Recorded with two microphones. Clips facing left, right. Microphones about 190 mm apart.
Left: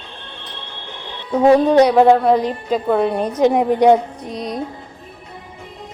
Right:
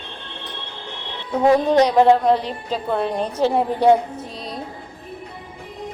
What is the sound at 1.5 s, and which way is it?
A woman's voice, 10° left (ahead or behind).